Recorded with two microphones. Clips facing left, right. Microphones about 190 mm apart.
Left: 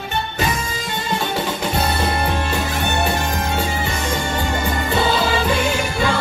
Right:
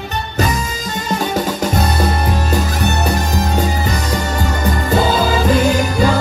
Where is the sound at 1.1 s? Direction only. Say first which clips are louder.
Right 4 dB; 40° right (ahead or behind).